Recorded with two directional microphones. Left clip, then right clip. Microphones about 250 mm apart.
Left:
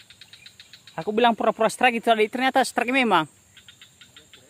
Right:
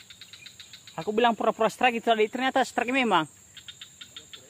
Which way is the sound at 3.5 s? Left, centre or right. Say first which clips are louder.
Right 4 dB; right.